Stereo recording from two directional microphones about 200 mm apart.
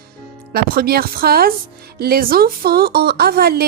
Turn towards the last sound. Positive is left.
turn(degrees=-50)  # may be behind; listen again after turning